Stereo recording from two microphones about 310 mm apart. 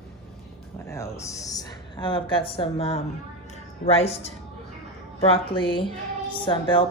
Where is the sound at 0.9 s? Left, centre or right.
Centre.